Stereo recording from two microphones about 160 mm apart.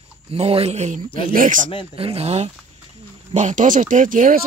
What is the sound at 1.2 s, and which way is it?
Speech, 55° right (ahead or behind).